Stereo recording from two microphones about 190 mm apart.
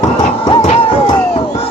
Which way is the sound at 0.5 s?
30° left (ahead or behind).